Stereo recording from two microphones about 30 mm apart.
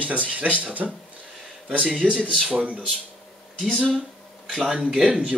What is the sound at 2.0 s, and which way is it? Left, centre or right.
Speech, right.